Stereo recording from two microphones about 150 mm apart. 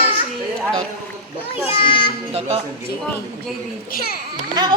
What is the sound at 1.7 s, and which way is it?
Speech, 35° left (ahead or behind).